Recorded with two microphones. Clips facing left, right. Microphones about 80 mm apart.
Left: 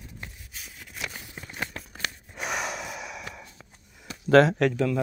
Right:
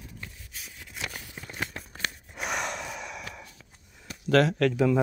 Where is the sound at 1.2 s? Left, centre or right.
Centre.